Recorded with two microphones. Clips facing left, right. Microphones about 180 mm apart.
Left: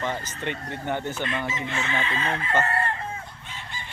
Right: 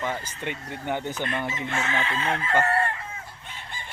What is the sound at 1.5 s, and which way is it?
Chicken, 50° right (ahead or behind).